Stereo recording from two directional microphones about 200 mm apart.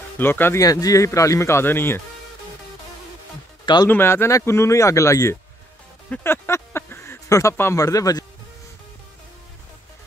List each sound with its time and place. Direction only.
0.2 s speech: 10° left (ahead or behind)
3.6 s speech: 20° left (ahead or behind)